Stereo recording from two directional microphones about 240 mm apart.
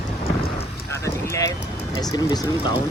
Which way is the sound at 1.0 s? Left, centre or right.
Centre.